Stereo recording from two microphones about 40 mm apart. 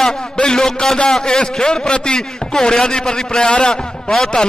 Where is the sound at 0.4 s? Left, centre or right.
Centre.